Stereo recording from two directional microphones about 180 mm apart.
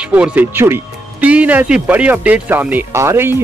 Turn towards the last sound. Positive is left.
turn(degrees=-15)  # may be behind; listen again after turning